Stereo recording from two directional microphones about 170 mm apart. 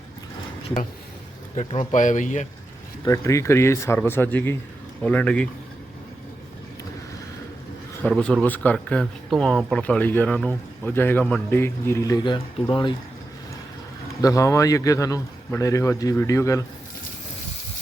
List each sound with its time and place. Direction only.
1.5 s speech: 40° left (ahead or behind)
3.0 s a man's voice: 20° left (ahead or behind)
8.1 s a man's voice: 5° left (ahead or behind); by 12.9 s 25° left (ahead or behind)
14.2 s a man's voice: 20° left (ahead or behind)